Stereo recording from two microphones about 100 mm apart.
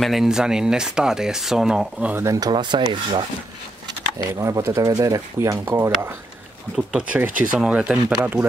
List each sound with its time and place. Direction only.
0.0 s speech: 5° right (ahead or behind)
2.1 s speech: 30° right (ahead or behind)
2.5 s speech: 50° right (ahead or behind)
4.4 s speech: 30° right (ahead or behind)
6.9 s speech: 10° right (ahead or behind)